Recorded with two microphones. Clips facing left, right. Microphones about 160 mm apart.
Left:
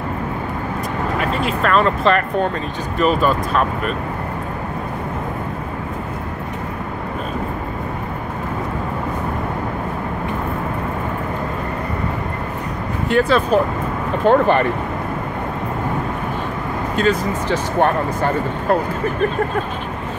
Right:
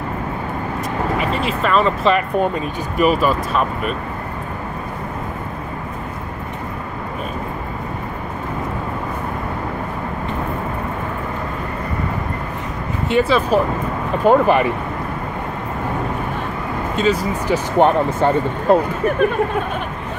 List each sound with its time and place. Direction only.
1.2 s speech: centre (ahead or behind)
13.1 s speech: 5° right (ahead or behind)
16.9 s speech: centre (ahead or behind)
17.5 s speech: 20° right (ahead or behind)